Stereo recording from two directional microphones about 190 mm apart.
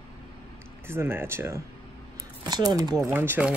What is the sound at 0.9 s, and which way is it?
Speech, 10° right (ahead or behind).